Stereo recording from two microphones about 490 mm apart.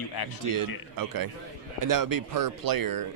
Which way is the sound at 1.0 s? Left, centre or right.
Right.